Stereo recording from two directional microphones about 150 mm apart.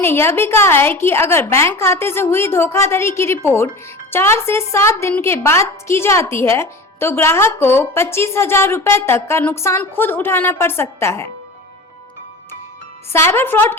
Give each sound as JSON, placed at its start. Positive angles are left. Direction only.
{"t": 0.0, "sound": "a woman's voice", "side_deg": 15}
{"t": 13.1, "sound": "a woman's voice", "side_deg": 15}